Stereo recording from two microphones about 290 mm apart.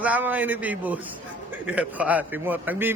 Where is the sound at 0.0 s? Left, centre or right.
Centre.